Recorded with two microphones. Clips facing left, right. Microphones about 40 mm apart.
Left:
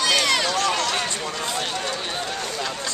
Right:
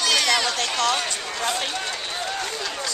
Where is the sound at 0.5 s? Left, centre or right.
Left.